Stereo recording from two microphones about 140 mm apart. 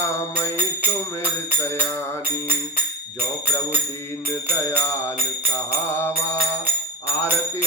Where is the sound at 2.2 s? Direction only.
15° right (ahead or behind).